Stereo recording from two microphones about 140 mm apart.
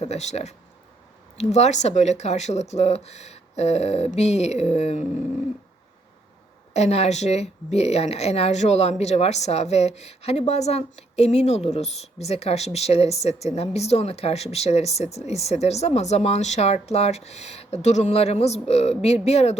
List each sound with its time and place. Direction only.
0.0 s speech: 50° left (ahead or behind)
6.7 s speech: 50° left (ahead or behind)